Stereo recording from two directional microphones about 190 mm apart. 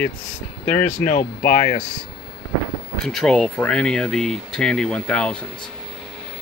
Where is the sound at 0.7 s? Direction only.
45° left (ahead or behind).